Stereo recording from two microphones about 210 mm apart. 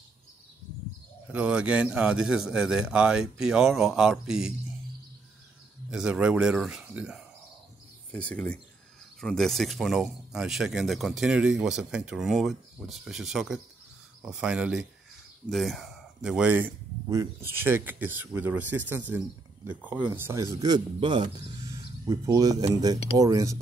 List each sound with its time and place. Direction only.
1.3 s speech: 5° right (ahead or behind)
5.9 s speech: 5° right (ahead or behind)